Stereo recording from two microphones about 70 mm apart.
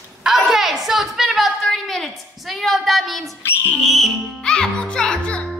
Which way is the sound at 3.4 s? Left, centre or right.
Left.